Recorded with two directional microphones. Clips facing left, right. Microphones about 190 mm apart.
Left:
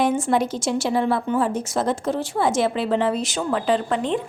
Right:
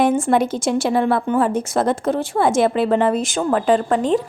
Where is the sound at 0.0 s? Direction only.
55° right (ahead or behind).